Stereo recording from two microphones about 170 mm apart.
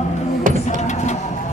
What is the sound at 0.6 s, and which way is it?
Music, 40° left (ahead or behind).